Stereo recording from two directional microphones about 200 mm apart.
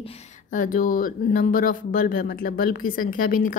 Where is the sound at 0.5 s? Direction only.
40° left (ahead or behind).